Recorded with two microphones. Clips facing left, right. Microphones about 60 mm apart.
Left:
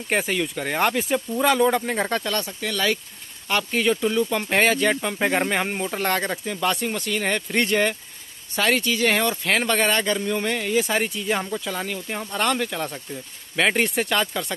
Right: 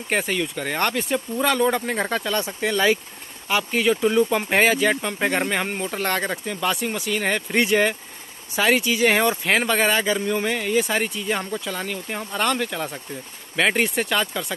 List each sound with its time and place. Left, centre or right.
0.1 s speech: centre
2.3 s speech: right
3.4 s speech: centre
4.0 s speech: centre